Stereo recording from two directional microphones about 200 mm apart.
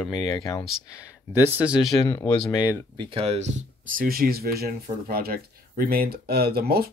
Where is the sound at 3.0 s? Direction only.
30° right (ahead or behind).